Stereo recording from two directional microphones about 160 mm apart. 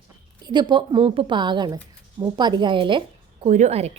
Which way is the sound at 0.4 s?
30° right (ahead or behind).